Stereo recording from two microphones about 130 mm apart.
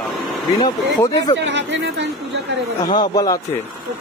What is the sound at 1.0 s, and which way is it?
Speech, 30° left (ahead or behind).